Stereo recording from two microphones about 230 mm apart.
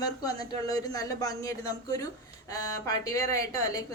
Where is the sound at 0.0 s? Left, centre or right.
Centre.